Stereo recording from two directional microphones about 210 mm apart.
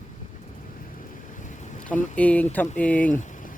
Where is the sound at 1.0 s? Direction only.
35° left (ahead or behind).